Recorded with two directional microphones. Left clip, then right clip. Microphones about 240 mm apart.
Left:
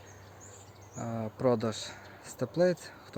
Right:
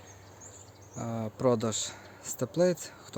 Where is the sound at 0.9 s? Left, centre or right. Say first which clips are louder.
Right 1 dB; centre.